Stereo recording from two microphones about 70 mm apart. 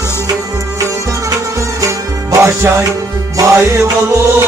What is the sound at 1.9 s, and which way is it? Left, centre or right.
Music, right.